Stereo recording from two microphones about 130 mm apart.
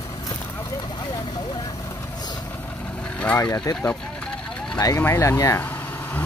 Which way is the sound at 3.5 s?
30° left (ahead or behind).